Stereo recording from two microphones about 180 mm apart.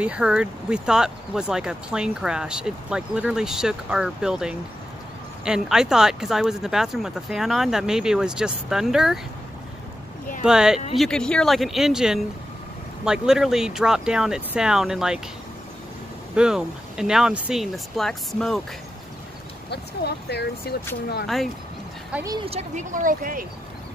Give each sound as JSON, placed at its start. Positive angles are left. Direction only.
{"t": 0.0, "sound": "speech", "side_deg": -5}
{"t": 10.4, "sound": "speech", "side_deg": -5}
{"t": 16.3, "sound": "speech", "side_deg": -5}
{"t": 19.7, "sound": "speech", "side_deg": 65}
{"t": 22.2, "sound": "speech", "side_deg": -20}
{"t": 22.5, "sound": "speech", "side_deg": -40}